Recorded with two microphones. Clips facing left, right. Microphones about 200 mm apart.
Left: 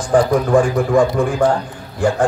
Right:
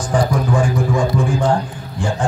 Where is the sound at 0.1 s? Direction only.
60° left (ahead or behind).